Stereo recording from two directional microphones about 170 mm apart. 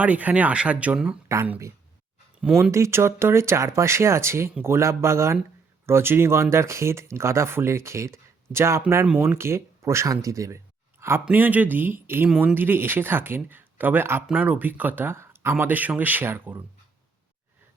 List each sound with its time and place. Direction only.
0.0 s speech: 10° right (ahead or behind)